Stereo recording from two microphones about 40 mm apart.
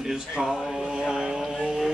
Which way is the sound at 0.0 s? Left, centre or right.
Centre.